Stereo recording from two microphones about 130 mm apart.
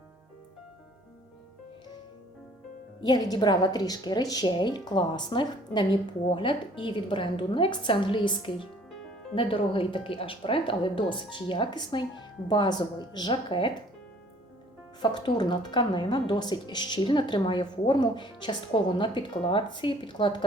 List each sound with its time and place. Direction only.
3.0 s speech: 30° left (ahead or behind)
15.0 s speech: 35° left (ahead or behind)